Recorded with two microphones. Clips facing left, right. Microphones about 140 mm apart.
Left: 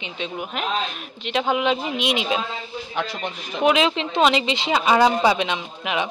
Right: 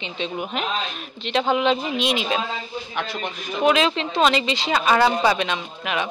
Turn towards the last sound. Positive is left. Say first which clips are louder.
# left 1 dB
turn(degrees=15)  # may be behind; listen again after turning